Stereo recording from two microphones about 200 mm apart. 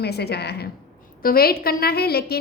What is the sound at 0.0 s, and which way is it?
A woman's voice, 55° left (ahead or behind).